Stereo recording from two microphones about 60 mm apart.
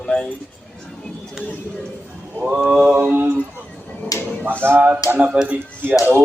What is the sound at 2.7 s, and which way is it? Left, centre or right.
Mantra, right.